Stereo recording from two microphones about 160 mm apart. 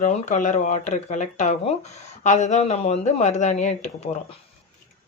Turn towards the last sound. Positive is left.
turn(degrees=45)  # may be behind; listen again after turning